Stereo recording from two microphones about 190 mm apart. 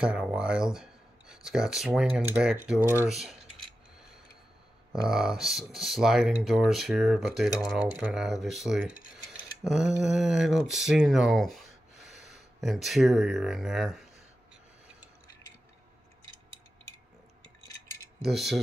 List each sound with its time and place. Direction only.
0.0 s speech: 5° right (ahead or behind)
3.1 s a sound: centre (ahead or behind)
5.0 s speech: 5° right (ahead or behind)
18.2 s speech: centre (ahead or behind)